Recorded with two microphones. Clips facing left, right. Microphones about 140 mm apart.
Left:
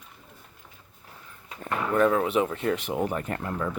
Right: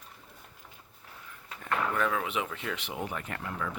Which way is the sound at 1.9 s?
35° left (ahead or behind).